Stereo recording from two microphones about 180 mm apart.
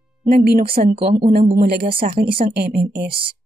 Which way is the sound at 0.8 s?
30° right (ahead or behind).